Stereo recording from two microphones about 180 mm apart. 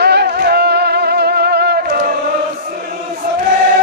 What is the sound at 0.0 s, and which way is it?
Music, 65° right (ahead or behind).